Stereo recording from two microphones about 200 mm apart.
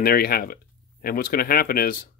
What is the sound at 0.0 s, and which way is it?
Speech, 50° left (ahead or behind).